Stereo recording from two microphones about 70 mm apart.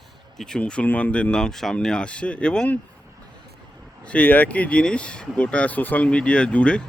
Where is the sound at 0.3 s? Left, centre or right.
Centre.